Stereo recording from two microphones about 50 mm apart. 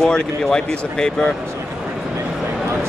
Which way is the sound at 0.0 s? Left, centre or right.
Centre.